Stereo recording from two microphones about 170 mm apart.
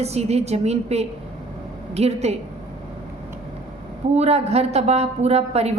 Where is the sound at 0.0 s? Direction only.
40° right (ahead or behind).